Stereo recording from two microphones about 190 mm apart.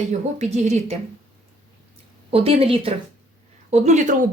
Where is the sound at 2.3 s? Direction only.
30° right (ahead or behind).